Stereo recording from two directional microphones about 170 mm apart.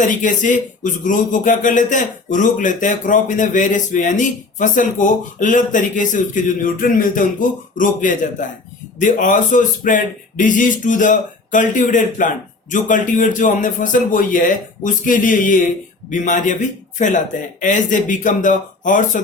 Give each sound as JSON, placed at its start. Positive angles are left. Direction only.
{"t": 0.0, "sound": "a man's voice", "side_deg": 50}